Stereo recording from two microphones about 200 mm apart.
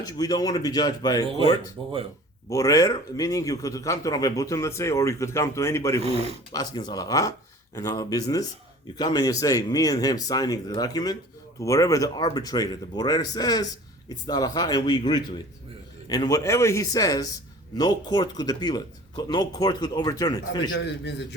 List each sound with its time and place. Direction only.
0.0 s speech: 20° left (ahead or behind)
2.5 s a man's voice: 15° left (ahead or behind)
6.0 s speech: 30° right (ahead or behind)
6.5 s a man's voice: 20° left (ahead or behind)
20.7 s a man's voice: 60° left (ahead or behind)